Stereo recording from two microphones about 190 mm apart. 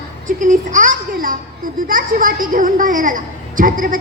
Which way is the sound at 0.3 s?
40° right (ahead or behind).